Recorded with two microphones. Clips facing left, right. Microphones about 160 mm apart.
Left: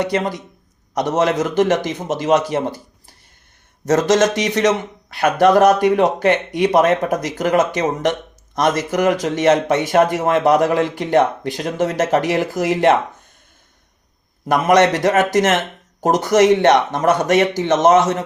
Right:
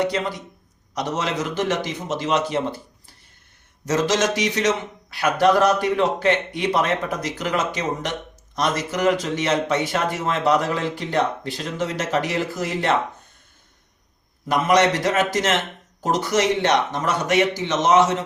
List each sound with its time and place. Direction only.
0.1 s speech: 50° left (ahead or behind)
2.5 s a sound: 40° left (ahead or behind)
3.8 s speech: 45° left (ahead or behind)
14.4 s speech: 50° left (ahead or behind)